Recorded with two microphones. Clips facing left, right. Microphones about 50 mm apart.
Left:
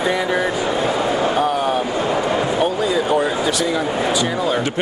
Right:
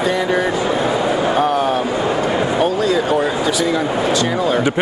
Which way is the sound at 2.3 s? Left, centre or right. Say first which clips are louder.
Right 2 dB; centre.